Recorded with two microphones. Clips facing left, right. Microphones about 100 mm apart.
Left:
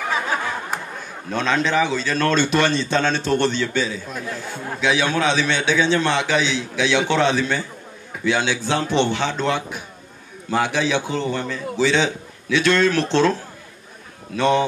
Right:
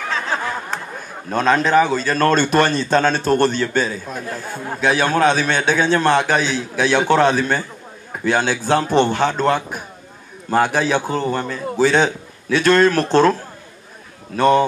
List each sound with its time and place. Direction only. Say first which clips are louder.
1.3 s a man's voice: right 5 dB; 45° right (ahead or behind)